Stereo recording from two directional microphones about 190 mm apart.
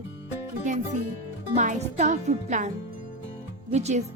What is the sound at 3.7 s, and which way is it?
Speech, 35° right (ahead or behind).